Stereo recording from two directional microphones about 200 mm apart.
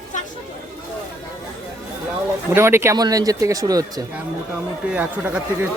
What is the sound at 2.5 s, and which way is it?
Speech, 10° right (ahead or behind).